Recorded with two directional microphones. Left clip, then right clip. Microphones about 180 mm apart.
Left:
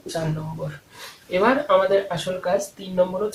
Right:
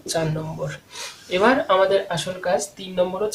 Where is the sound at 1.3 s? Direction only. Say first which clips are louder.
Even; 35° right (ahead or behind).